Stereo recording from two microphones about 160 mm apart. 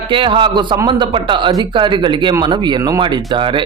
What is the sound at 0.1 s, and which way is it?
A man's voice, 30° right (ahead or behind).